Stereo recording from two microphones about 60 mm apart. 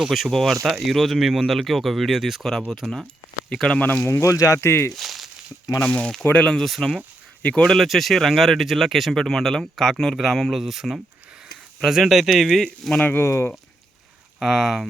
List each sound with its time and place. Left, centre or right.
0.1 s speech: centre
3.5 s speech: centre
3.8 s speech: left
4.1 s speech: left
4.6 s speech: left
4.9 s a sound: centre
5.8 s speech: centre
6.6 s speech: centre
7.4 s speech: centre
7.7 s speech: centre
13.2 s speech: left
14.3 s speech: centre